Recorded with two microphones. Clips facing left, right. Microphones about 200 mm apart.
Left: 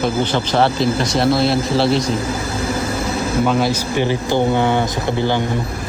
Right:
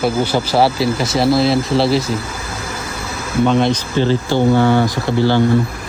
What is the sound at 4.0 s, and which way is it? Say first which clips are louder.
Speech: right 2 dB; 15° left (ahead or behind).